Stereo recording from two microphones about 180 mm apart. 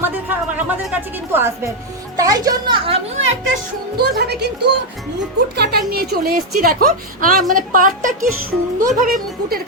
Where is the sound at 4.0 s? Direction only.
65° right (ahead or behind).